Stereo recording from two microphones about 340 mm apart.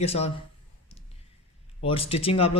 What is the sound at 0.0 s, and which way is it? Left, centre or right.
Speech, centre.